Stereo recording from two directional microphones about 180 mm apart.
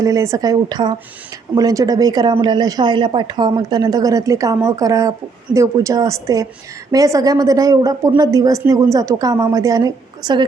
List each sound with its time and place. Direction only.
0.0 s a woman's voice: 15° right (ahead or behind)